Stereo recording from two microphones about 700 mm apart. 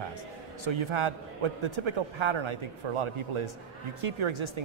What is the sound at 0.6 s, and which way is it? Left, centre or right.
A man's voice, right.